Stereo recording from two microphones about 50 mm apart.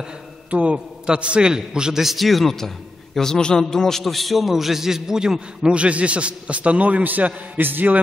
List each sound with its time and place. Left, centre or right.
0.5 s a man's voice: right